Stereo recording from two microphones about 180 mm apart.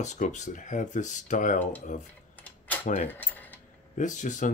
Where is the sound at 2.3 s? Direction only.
10° left (ahead or behind).